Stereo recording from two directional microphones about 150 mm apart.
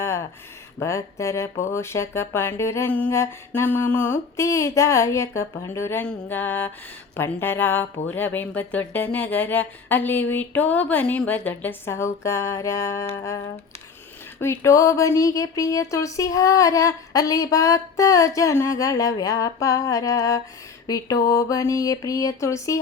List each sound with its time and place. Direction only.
0.0 s a sound: 20° left (ahead or behind)
0.8 s speech: 20° left (ahead or behind)
14.4 s speech: 20° left (ahead or behind)